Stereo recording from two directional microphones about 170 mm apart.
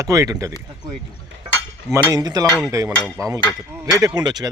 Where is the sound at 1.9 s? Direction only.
20° right (ahead or behind).